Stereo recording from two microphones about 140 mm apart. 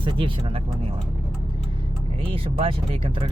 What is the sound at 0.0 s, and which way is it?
Speech, 35° right (ahead or behind).